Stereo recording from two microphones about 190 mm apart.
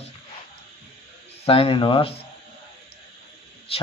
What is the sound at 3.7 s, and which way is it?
Speech, 30° left (ahead or behind).